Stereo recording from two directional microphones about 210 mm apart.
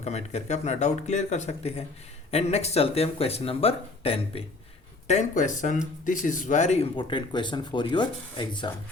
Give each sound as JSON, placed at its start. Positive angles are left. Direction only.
{"t": 0.0, "sound": "speech", "side_deg": 30}